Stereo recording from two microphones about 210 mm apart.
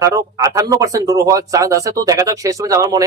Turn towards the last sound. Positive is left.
turn(degrees=-15)  # may be behind; listen again after turning